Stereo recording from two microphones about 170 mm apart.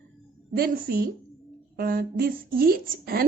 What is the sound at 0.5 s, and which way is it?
A woman's voice, 60° right (ahead or behind).